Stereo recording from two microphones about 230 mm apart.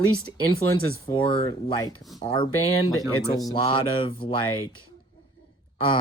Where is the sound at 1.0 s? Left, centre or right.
Left.